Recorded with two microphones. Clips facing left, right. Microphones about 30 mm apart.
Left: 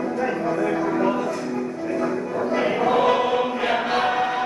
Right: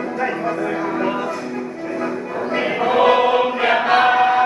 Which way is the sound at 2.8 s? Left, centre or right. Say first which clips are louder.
Right 6 dB; right.